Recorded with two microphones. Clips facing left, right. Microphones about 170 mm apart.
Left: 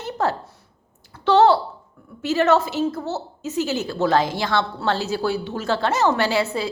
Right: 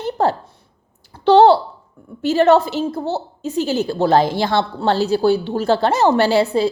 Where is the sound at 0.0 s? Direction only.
30° right (ahead or behind).